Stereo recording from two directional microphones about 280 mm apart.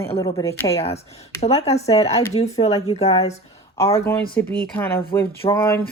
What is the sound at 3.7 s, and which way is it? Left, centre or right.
Speech, centre.